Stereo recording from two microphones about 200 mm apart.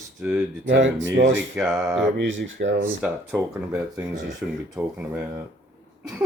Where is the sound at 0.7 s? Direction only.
65° right (ahead or behind).